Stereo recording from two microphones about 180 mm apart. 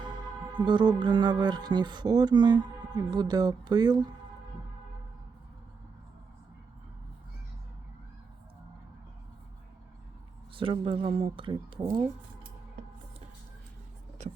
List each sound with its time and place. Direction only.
0.5 s speech: 25° right (ahead or behind)
10.5 s speech: 30° right (ahead or behind)
14.2 s speech: 40° right (ahead or behind)